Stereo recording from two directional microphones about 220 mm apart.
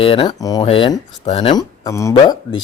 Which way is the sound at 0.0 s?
25° left (ahead or behind).